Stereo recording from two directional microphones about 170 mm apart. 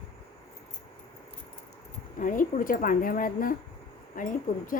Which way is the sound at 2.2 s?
50° left (ahead or behind).